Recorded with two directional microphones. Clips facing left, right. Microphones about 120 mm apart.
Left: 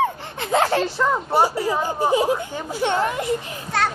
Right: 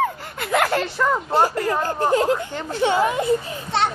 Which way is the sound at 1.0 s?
10° left (ahead or behind).